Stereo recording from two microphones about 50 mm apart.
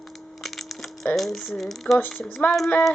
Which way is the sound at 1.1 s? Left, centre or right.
Centre.